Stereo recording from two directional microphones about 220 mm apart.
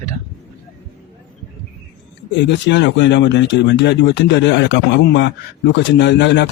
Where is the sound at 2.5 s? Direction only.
55° left (ahead or behind).